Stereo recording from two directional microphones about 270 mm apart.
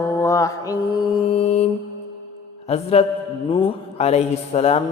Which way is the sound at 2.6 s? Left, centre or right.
Left.